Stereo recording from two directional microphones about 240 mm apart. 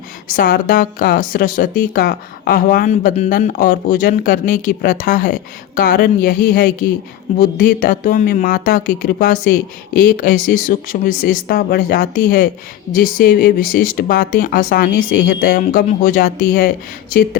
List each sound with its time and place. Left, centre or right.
0.3 s speech: left